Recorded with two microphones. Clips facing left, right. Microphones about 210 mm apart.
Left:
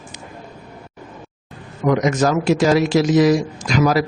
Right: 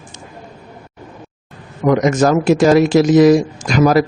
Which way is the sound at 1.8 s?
50° right (ahead or behind).